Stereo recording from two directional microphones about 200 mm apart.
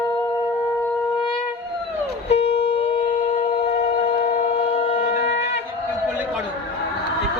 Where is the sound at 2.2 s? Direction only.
30° left (ahead or behind).